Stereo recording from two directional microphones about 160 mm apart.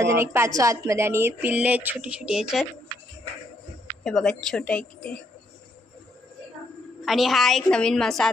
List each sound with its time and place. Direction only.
0.0 s speech: 15° right (ahead or behind)
4.0 s a woman's voice: 5° left (ahead or behind)
7.1 s a woman's voice: centre (ahead or behind)